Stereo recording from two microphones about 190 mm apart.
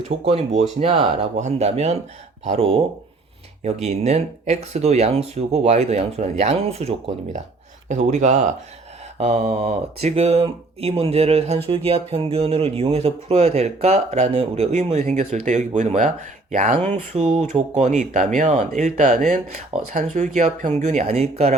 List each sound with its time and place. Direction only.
0.3 s speech: 30° right (ahead or behind)